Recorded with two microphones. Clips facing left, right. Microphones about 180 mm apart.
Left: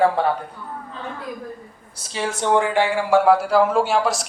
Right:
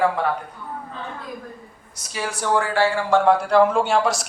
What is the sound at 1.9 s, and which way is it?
Speech, 30° left (ahead or behind).